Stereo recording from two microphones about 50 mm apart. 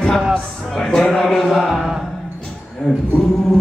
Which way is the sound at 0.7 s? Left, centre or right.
Centre.